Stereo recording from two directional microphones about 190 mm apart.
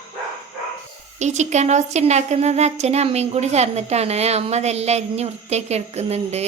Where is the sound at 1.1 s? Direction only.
40° right (ahead or behind).